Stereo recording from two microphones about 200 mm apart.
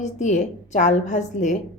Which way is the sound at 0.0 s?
35° left (ahead or behind).